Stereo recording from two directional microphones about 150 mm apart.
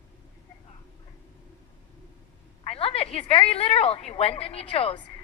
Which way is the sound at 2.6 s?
40° left (ahead or behind).